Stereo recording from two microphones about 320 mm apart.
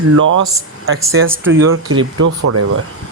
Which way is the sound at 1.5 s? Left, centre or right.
Right.